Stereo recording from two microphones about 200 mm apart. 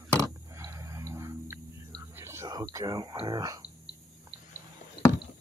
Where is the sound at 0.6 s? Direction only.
15° right (ahead or behind).